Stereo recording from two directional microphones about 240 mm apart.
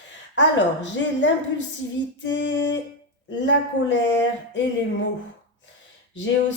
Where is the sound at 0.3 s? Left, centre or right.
Left.